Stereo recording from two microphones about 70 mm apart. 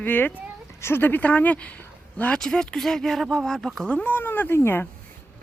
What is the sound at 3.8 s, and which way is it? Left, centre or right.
A child's voice, left.